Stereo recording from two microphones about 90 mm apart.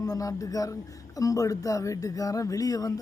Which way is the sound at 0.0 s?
40° left (ahead or behind).